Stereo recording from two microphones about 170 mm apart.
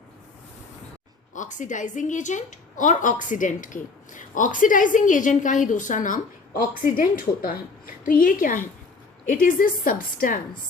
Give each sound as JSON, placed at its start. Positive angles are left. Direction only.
{"t": 1.3, "sound": "a woman's voice", "side_deg": 45}